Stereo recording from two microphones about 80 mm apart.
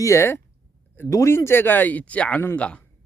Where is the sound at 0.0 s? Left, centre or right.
Left.